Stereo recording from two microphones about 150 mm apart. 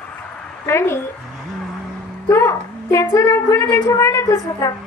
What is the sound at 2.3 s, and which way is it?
A woman's voice, 15° left (ahead or behind).